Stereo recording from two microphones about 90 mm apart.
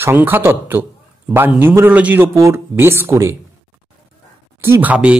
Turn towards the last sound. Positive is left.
turn(degrees=-15)  # may be behind; listen again after turning